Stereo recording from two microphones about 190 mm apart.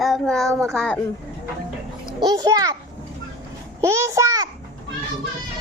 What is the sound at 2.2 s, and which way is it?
Speech, 20° right (ahead or behind).